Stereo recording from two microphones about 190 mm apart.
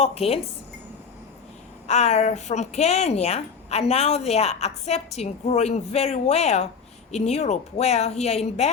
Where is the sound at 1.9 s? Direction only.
35° left (ahead or behind).